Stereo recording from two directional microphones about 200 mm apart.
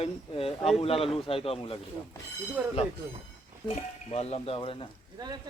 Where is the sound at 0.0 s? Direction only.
30° left (ahead or behind).